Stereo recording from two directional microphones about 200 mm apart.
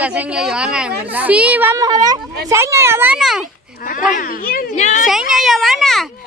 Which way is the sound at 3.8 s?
40° left (ahead or behind).